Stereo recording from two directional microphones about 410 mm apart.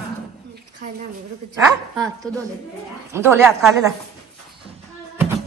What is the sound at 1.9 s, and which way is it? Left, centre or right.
A woman's voice, centre.